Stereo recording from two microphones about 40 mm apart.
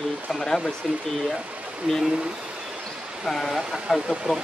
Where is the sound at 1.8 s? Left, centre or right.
Right.